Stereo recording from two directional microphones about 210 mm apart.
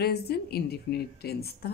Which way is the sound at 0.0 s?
50° left (ahead or behind).